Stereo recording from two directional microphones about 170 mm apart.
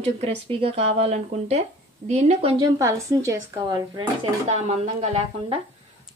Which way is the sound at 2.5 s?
20° right (ahead or behind).